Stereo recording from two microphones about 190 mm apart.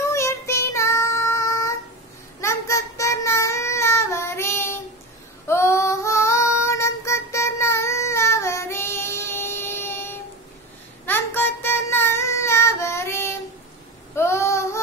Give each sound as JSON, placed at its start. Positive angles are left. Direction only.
{"t": 0.1, "sound": "child singing", "side_deg": 15}
{"t": 5.5, "sound": "female singing", "side_deg": 15}
{"t": 11.1, "sound": "child singing", "side_deg": 10}